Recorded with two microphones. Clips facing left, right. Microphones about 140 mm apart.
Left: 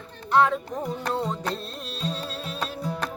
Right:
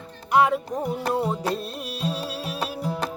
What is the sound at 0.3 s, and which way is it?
Music, 10° right (ahead or behind).